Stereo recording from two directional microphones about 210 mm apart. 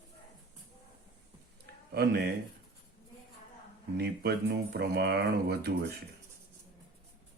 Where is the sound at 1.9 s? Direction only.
50° right (ahead or behind).